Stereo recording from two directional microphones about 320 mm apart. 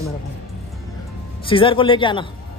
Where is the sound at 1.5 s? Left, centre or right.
Centre.